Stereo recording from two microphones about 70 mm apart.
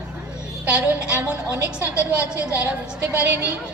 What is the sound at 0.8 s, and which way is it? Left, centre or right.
A woman's voice, right.